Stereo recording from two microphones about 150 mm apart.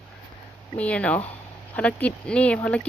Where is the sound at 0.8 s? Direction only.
10° left (ahead or behind).